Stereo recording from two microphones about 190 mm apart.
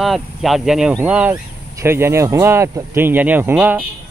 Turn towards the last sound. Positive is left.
turn(degrees=-10)  # may be behind; listen again after turning